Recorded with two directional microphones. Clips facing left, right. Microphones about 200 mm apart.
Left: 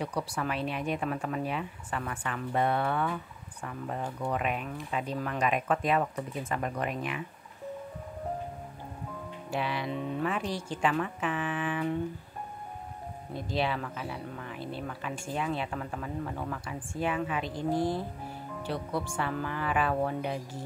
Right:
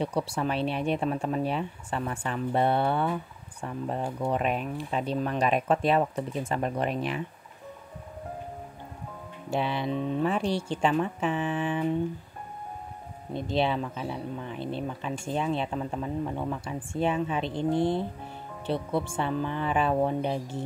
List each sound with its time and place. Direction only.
0.0 s speech: 25° right (ahead or behind)
9.5 s speech: 25° right (ahead or behind)
13.3 s speech: 25° right (ahead or behind)